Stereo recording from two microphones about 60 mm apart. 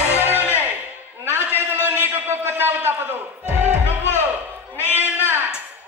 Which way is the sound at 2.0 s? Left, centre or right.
Right.